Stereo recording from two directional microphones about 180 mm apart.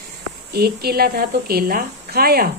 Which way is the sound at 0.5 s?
60° right (ahead or behind).